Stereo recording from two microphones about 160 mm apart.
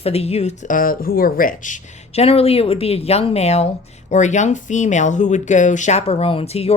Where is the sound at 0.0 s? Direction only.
40° left (ahead or behind).